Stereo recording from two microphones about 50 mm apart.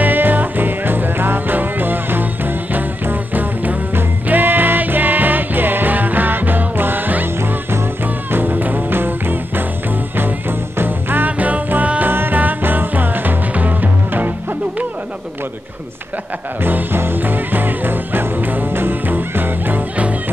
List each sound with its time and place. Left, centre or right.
0.0 s music: right
8.3 s music: right
10.8 s music: right
12.1 s music: right
16.6 s music: right